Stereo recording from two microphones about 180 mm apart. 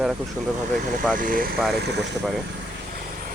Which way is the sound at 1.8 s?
70° right (ahead or behind).